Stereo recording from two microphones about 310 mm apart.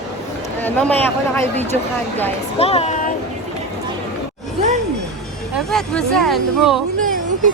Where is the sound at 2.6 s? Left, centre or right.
Centre.